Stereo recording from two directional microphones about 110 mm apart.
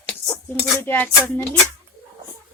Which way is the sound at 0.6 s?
20° left (ahead or behind).